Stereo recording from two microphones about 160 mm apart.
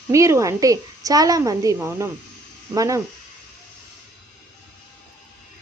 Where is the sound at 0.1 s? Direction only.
20° right (ahead or behind).